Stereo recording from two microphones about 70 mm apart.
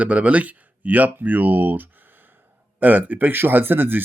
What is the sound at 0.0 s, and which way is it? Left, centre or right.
Speech, centre.